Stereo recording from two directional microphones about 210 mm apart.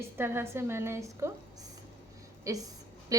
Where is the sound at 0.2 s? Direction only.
10° right (ahead or behind).